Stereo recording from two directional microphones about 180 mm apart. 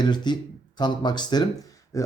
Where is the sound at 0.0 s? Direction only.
25° left (ahead or behind).